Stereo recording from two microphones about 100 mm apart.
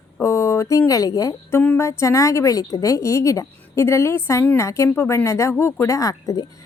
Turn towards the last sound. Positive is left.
turn(degrees=35)  # may be behind; listen again after turning